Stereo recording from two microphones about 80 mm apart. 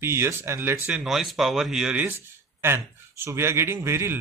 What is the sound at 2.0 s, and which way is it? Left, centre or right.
A man's voice, right.